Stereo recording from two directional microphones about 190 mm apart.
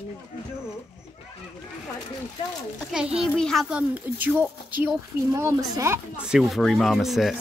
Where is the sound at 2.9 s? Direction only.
5° right (ahead or behind).